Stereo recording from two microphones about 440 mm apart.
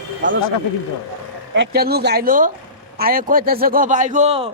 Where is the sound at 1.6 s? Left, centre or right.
Right.